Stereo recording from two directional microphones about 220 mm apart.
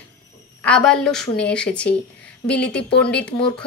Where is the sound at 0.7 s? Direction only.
5° left (ahead or behind).